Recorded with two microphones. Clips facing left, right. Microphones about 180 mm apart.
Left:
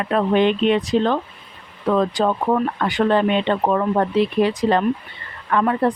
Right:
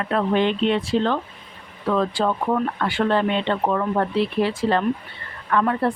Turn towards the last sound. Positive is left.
turn(degrees=15)  # may be behind; listen again after turning